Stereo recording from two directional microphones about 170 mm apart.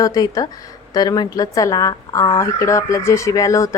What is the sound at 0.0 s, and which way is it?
Speech, 20° left (ahead or behind).